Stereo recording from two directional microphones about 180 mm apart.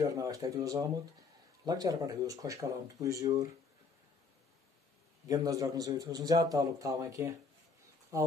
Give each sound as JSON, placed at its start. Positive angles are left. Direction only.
{"t": 0.0, "sound": "a man's voice", "side_deg": -20}
{"t": 5.3, "sound": "a man's voice", "side_deg": -20}